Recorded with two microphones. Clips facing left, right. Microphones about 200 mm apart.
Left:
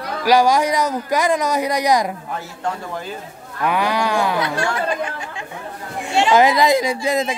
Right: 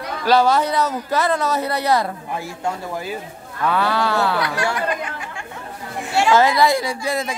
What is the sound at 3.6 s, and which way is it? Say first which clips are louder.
Speech: even; 15° left (ahead or behind).